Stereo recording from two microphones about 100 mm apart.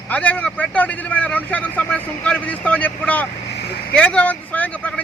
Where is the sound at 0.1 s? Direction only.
15° left (ahead or behind).